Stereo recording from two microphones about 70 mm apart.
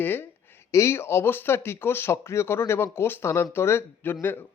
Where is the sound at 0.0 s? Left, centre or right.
Left.